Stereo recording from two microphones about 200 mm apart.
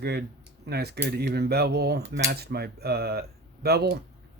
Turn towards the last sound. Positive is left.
turn(degrees=-50)  # may be behind; listen again after turning